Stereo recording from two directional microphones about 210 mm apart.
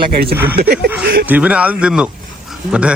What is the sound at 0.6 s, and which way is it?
Speech, 50° right (ahead or behind).